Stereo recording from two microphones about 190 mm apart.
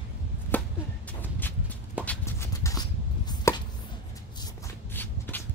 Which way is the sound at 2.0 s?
15° left (ahead or behind).